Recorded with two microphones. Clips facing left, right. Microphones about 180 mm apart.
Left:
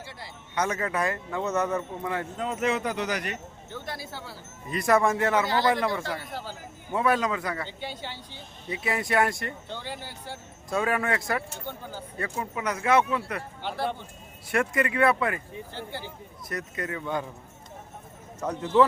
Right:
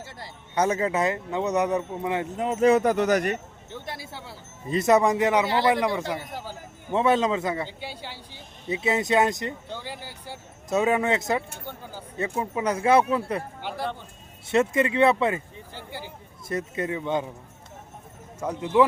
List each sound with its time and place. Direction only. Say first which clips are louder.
0.5 s speech: right 5 dB; 30° right (ahead or behind)
2.6 s speech: right 10 dB; 45° right (ahead or behind)
3.7 s speech: even; 25° right (ahead or behind)
7.8 s speech: left 1 dB; 10° right (ahead or behind)
8.7 s speech: right 4 dB; 25° right (ahead or behind)
9.7 s speech: even; 10° right (ahead or behind)
10.7 s speech: right 4 dB; 20° right (ahead or behind)
13.6 s speech: even; 10° right (ahead or behind)
14.5 s speech: right 4 dB; 25° right (ahead or behind)
15.7 s speech: right 1 dB; 10° right (ahead or behind)
16.5 s speech: right 5 dB; 25° right (ahead or behind)
18.3 s speech: right 1 dB; 10° right (ahead or behind)